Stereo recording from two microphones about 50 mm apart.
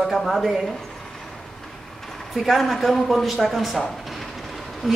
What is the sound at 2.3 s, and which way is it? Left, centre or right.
Speech, centre.